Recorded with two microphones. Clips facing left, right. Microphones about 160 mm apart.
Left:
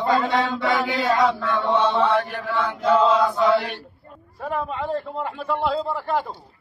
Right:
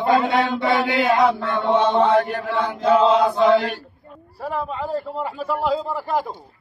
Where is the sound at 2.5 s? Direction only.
35° right (ahead or behind).